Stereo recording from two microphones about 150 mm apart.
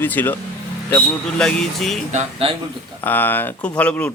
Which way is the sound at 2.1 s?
50° right (ahead or behind).